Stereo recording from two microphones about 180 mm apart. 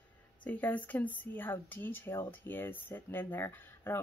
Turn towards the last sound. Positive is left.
turn(degrees=10)  # may be behind; listen again after turning